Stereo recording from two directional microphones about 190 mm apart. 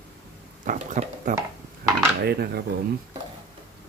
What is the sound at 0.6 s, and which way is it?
Speech, 45° right (ahead or behind).